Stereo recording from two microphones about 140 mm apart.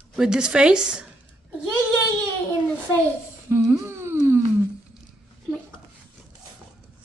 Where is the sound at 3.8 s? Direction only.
15° right (ahead or behind).